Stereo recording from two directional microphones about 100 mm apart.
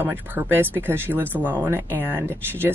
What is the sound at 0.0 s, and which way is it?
Speech, 20° right (ahead or behind).